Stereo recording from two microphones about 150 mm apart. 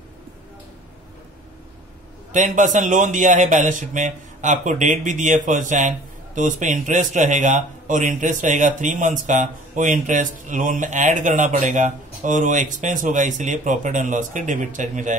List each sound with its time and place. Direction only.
2.3 s a man's voice: 55° right (ahead or behind)